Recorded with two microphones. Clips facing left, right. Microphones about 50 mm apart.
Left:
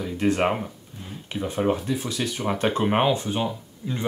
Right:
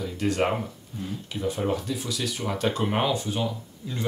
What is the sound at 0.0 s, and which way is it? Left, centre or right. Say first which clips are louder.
Speech: left 3 dB; left.